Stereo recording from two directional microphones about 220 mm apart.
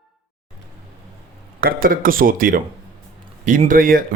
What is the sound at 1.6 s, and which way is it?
A man's voice, 40° right (ahead or behind).